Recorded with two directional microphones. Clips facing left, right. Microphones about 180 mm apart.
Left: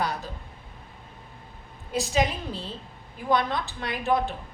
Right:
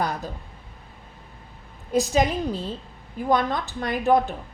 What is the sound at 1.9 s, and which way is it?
A woman's voice, 40° right (ahead or behind).